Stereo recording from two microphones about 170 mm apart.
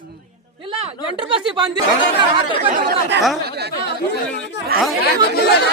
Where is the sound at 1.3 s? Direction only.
25° right (ahead or behind).